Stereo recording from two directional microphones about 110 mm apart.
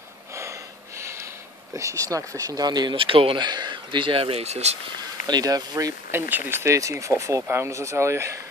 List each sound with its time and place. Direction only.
0.4 s a sound: 25° right (ahead or behind)
1.7 s speech: 30° right (ahead or behind); by 4.7 s 80° right
5.2 s speech: 35° right (ahead or behind)
6.1 s speech: 20° right (ahead or behind)